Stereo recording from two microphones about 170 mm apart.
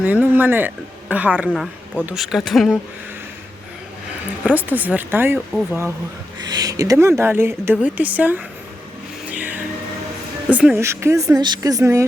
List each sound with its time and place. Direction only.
0.0 s speech: 10° right (ahead or behind)
1.5 s speech: 5° left (ahead or behind)
4.4 s a woman's voice: 10° right (ahead or behind)
6.4 s a woman's voice: 25° right (ahead or behind)
9.3 s music: 10° right (ahead or behind)
10.5 s a woman's voice: 5° right (ahead or behind)